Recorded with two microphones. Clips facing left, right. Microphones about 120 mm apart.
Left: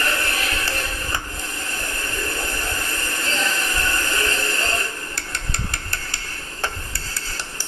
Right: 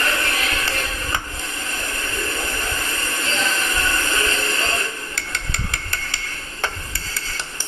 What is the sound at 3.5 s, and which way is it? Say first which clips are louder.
Train: right 2 dB; 20° right (ahead or behind).